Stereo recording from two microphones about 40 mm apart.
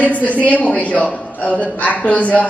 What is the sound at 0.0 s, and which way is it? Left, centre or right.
A woman's voice, left.